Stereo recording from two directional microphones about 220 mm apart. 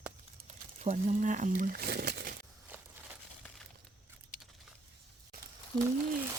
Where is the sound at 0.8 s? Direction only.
30° right (ahead or behind).